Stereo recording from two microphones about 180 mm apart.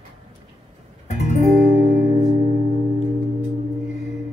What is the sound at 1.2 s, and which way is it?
Music, 40° left (ahead or behind).